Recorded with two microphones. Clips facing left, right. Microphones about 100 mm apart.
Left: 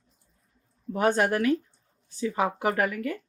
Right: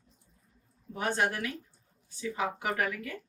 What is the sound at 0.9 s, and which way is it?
Speech, 60° left (ahead or behind).